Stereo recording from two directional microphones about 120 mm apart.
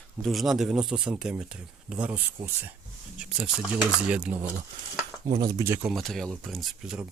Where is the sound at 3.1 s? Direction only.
10° right (ahead or behind).